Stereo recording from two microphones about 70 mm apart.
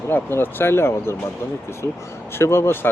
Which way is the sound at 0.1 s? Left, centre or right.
Left.